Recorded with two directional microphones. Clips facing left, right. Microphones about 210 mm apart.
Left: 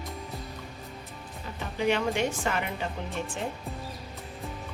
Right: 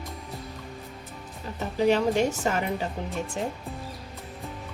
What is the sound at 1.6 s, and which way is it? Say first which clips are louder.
A woman's voice: right 5 dB; 35° right (ahead or behind).